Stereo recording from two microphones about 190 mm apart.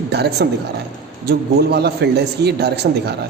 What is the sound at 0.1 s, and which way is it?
A man's voice, 60° right (ahead or behind).